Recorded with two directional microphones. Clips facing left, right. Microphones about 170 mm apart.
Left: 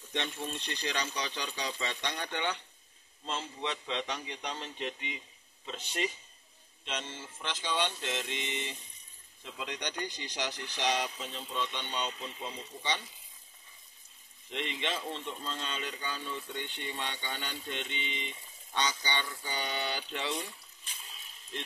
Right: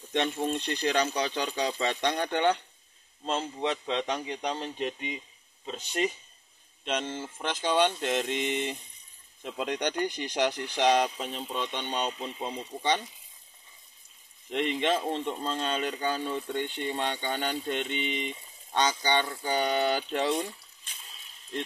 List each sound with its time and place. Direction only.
0.1 s speech: 55° right (ahead or behind)
14.5 s speech: 50° right (ahead or behind)